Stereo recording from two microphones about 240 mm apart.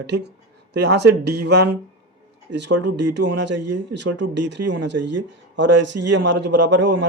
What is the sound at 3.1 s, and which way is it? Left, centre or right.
Speech, right.